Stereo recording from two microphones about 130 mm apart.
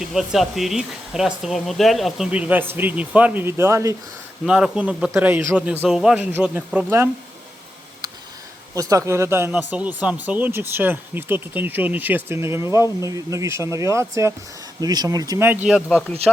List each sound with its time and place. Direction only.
0.0 s speech: 5° right (ahead or behind); by 3.9 s 20° right (ahead or behind)
4.4 s speech: 5° right (ahead or behind)
5.8 s speech: 5° right (ahead or behind)
8.7 s speech: 25° right (ahead or behind)
15.4 s speech: 15° right (ahead or behind)
15.9 s speech: 5° left (ahead or behind)